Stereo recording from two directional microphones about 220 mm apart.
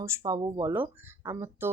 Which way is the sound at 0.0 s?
15° right (ahead or behind).